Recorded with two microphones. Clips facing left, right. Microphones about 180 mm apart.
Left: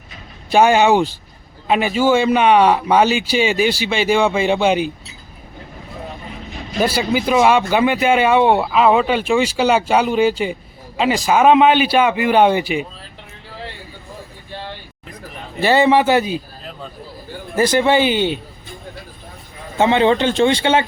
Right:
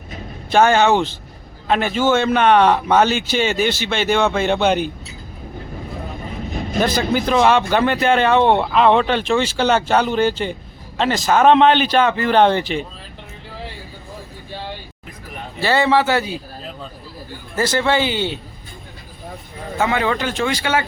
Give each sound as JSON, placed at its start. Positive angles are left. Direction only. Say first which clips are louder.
{"t": 0.5, "sound": "speech", "louder": "left 1 dB", "side_deg": 10}
{"t": 6.7, "sound": "speech", "louder": "left 1 dB", "side_deg": 10}
{"t": 15.6, "sound": "speech", "louder": "left 3 dB", "side_deg": 15}
{"t": 17.5, "sound": "speech", "louder": "left 4 dB", "side_deg": 15}
{"t": 19.8, "sound": "a man's voice", "louder": "left 6 dB", "side_deg": 25}